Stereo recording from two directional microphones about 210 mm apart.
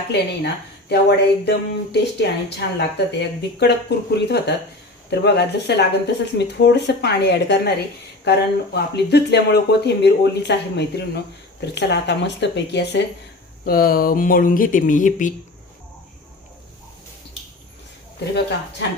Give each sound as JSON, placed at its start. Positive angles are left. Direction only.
{"t": 0.1, "sound": "speech", "side_deg": 55}